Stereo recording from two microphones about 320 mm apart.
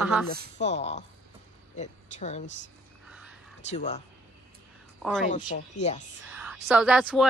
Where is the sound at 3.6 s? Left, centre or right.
Left.